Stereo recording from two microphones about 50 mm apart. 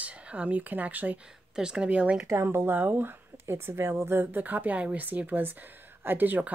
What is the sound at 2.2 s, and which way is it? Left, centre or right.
Speech, right.